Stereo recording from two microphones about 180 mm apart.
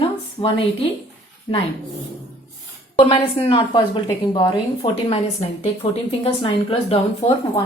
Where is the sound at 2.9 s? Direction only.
30° left (ahead or behind).